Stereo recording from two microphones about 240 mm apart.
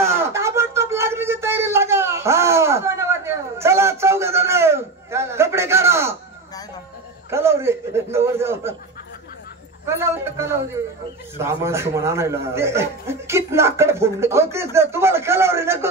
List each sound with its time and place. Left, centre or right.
0.0 s a sound: centre
7.2 s chuckle: centre
9.8 s a man's voice: centre